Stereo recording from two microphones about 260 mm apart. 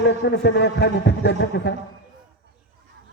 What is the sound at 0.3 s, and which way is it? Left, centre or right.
A man's voice, left.